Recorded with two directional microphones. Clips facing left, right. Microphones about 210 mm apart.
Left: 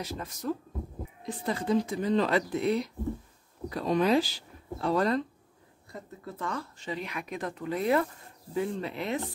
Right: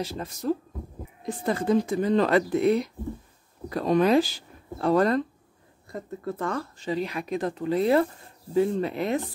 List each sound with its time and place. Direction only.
0.0 s speech: 30° right (ahead or behind)
1.2 s speech: 50° right (ahead or behind)
6.8 s speech: 35° right (ahead or behind)